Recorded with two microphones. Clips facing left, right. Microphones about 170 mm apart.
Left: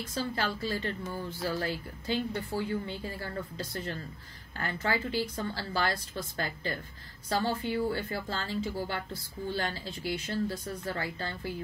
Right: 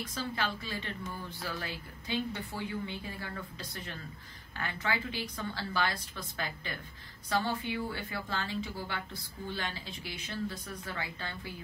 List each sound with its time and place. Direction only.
0.1 s a woman's voice: 35° left (ahead or behind)